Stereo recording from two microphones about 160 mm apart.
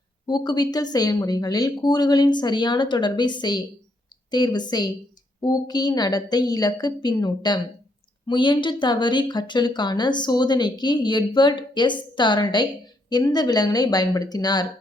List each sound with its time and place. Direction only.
0.3 s speech: 25° left (ahead or behind)